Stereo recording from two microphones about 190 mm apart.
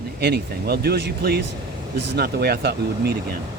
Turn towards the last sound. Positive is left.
turn(degrees=-55)  # may be behind; listen again after turning